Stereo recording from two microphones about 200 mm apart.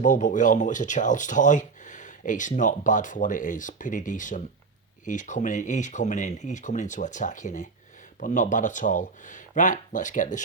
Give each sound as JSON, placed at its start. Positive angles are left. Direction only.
{"t": 0.0, "sound": "speech", "side_deg": 40}